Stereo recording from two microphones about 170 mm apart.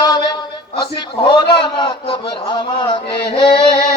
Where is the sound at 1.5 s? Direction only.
30° left (ahead or behind).